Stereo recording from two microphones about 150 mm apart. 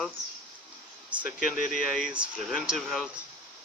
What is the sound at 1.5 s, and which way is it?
Speech, 65° left (ahead or behind).